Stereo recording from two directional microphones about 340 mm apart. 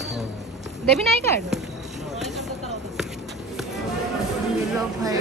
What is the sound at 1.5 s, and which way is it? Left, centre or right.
Basketball bounce, centre.